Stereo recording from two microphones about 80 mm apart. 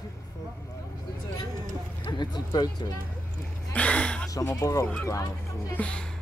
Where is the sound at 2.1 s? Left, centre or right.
Left.